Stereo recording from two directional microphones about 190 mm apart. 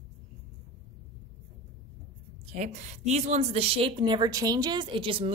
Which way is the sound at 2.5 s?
40° right (ahead or behind).